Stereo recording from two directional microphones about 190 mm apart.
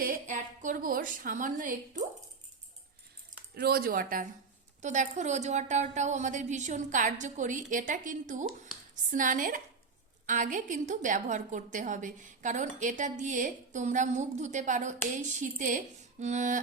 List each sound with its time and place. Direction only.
0.0 s a woman's voice: 45° right (ahead or behind)
3.5 s a woman's voice: 55° right (ahead or behind); by 16.6 s 40° right (ahead or behind)